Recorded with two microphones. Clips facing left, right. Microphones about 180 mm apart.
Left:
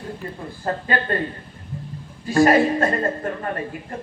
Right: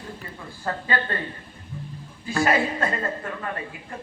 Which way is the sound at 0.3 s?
35° left (ahead or behind).